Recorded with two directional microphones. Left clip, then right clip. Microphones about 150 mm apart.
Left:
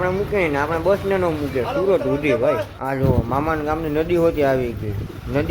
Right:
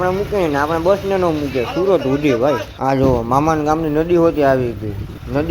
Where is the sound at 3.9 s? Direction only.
10° right (ahead or behind).